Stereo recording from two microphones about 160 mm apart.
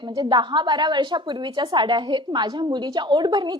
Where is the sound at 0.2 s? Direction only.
30° right (ahead or behind).